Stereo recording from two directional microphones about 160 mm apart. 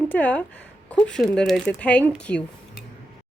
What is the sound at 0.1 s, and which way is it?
Speech, 10° left (ahead or behind).